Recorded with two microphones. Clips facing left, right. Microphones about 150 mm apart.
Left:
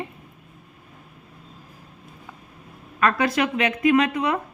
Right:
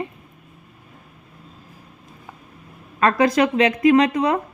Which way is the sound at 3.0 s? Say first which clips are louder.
Right 4 dB; 35° right (ahead or behind).